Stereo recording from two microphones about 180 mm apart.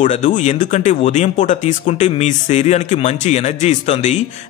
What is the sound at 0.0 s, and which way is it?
Speech, 40° left (ahead or behind).